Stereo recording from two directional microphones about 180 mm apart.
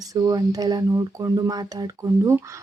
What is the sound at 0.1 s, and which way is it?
Speech, 20° right (ahead or behind).